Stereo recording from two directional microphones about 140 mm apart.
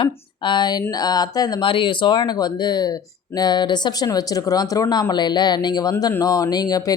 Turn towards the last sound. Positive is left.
turn(degrees=30)  # may be behind; listen again after turning